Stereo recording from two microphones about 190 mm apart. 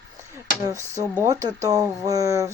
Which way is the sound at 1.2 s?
20° right (ahead or behind).